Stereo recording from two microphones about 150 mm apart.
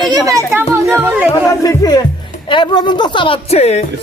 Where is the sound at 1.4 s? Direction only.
25° left (ahead or behind); by 3.8 s 45° left (ahead or behind).